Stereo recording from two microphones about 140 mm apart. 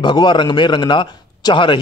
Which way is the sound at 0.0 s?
35° left (ahead or behind).